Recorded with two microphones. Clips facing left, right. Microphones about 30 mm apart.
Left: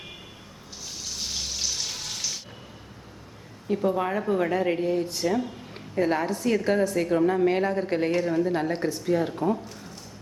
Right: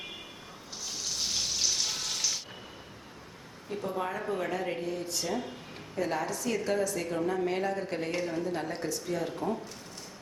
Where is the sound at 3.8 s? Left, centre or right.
Left.